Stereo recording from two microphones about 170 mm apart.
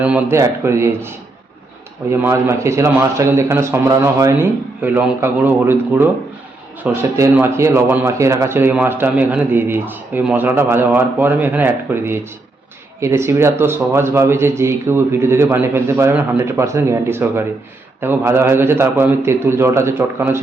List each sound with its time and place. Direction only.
0.0 s speech: 10° right (ahead or behind)